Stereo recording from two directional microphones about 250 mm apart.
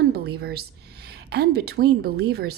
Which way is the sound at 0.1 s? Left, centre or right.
Right.